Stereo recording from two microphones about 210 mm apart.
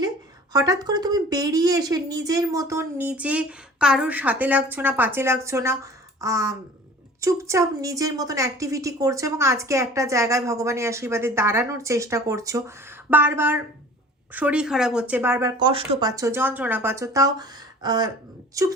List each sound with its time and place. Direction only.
0.5 s a woman's voice: 15° right (ahead or behind)